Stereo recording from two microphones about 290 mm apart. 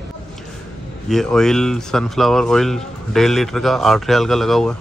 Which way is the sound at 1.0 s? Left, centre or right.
Centre.